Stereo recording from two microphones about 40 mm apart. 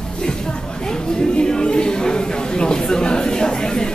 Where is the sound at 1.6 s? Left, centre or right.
Left.